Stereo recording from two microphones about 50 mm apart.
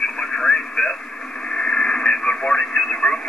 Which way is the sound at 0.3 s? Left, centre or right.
Centre.